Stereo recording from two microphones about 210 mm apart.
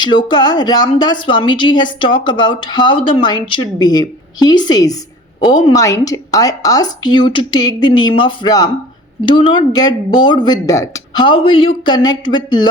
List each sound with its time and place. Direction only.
0.0 s speech: 20° left (ahead or behind)